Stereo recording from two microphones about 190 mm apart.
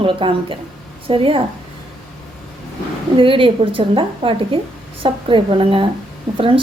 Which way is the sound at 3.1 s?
30° right (ahead or behind).